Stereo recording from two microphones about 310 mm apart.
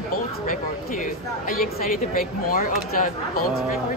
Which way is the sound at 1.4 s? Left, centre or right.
Left.